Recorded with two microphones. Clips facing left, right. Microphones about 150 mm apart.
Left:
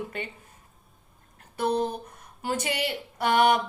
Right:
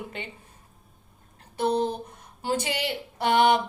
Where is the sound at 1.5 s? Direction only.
25° right (ahead or behind).